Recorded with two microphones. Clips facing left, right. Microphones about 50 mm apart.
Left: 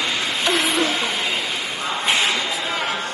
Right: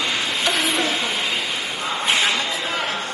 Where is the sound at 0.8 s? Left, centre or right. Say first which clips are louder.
Left 1 dB; left.